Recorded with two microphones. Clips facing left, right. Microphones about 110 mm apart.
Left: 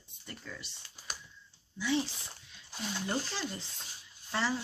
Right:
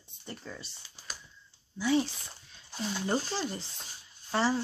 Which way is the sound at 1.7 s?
40° right (ahead or behind).